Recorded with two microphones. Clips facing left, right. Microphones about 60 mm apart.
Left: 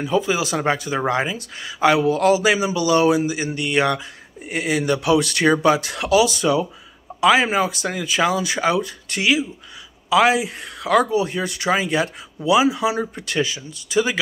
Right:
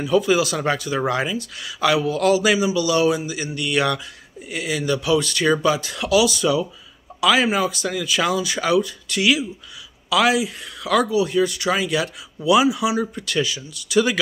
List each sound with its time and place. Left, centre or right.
0.1 s speech: left
13.9 s speech: centre